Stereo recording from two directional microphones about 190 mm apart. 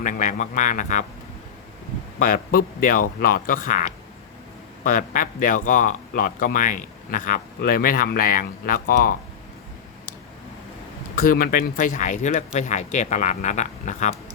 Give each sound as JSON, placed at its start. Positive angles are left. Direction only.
{"t": 0.0, "sound": "speech", "side_deg": 45}
{"t": 2.1, "sound": "speech", "side_deg": 45}
{"t": 11.1, "sound": "speech", "side_deg": 50}